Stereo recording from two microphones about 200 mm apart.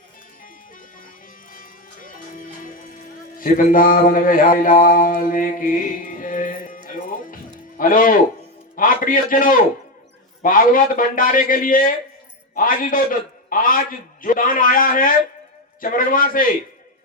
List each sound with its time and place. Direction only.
1.5 s music: 45° left (ahead or behind)
7.8 s a man's voice: 45° left (ahead or behind)